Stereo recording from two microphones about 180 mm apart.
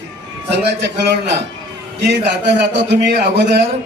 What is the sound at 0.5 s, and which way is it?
Speech, 70° right (ahead or behind).